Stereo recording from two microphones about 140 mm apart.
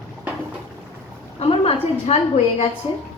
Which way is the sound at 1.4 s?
45° left (ahead or behind).